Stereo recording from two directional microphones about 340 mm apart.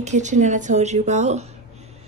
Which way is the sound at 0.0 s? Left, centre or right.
Right.